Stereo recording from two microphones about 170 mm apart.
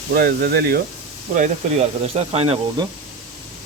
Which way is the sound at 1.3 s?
40° right (ahead or behind).